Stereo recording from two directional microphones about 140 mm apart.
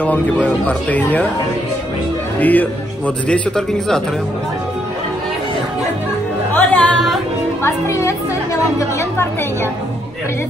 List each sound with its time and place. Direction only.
0.0 s speech: 10° left (ahead or behind)
2.4 s speech: 10° left (ahead or behind)
6.5 s music: 10° left (ahead or behind)
7.6 s speech: 20° left (ahead or behind)